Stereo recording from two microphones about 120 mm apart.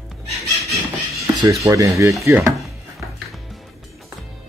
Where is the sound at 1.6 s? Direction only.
25° right (ahead or behind).